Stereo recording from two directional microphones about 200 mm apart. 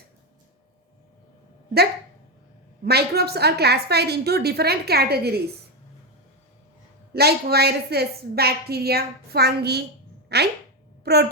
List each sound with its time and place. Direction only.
2.8 s a woman's voice: 50° right (ahead or behind)
7.1 s a woman's voice: 55° right (ahead or behind)